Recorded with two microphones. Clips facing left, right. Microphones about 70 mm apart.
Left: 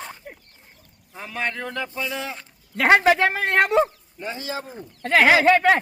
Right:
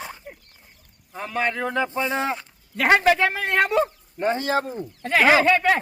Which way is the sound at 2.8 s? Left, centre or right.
Left.